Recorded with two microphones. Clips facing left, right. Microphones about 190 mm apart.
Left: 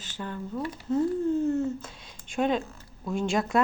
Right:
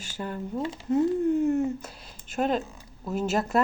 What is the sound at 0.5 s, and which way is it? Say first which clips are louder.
A woman's voice: right 2 dB; 25° right (ahead or behind).